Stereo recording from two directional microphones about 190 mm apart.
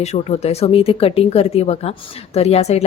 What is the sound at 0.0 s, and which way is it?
Speech, 35° left (ahead or behind).